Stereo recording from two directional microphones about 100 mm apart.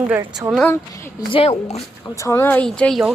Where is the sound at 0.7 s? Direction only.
35° left (ahead or behind).